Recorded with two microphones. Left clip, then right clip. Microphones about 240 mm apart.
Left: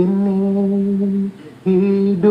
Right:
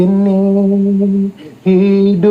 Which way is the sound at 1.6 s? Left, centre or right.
Right.